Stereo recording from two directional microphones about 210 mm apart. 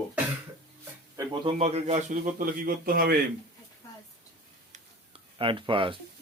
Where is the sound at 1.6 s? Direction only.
30° right (ahead or behind).